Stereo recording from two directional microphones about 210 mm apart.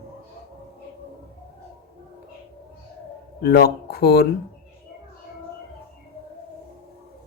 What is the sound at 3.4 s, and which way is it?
Speech, 50° left (ahead or behind).